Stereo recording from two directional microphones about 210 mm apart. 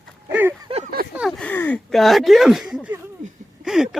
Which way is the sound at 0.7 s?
25° right (ahead or behind).